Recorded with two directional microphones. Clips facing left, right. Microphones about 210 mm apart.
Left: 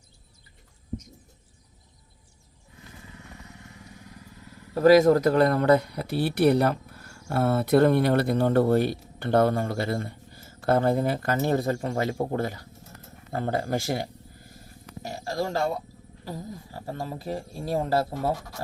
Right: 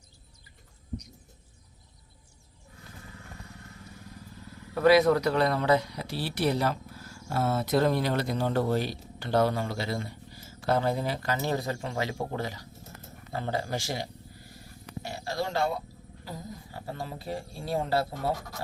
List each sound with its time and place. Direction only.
4.7 s speech: 40° left (ahead or behind)
15.0 s a sound: 45° left (ahead or behind)
16.7 s speech: 40° left (ahead or behind)